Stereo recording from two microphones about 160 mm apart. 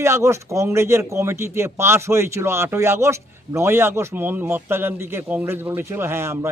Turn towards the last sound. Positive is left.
turn(degrees=-15)  # may be behind; listen again after turning